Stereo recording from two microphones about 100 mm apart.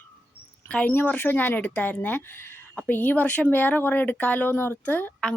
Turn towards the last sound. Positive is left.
turn(degrees=15)  # may be behind; listen again after turning